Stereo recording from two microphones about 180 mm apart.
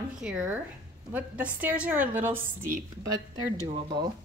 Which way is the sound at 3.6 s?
25° right (ahead or behind).